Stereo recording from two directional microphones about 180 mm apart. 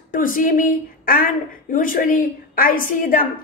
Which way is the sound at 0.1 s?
50° left (ahead or behind).